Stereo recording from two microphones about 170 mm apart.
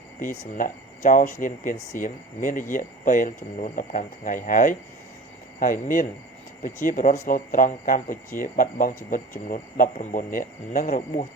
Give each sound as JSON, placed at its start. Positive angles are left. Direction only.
{"t": 0.2, "sound": "speech", "side_deg": 55}